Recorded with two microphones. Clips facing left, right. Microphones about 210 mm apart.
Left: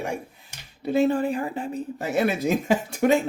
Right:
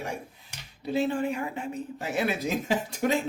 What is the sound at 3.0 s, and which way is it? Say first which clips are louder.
Speech: left 7 dB; 60° left (ahead or behind).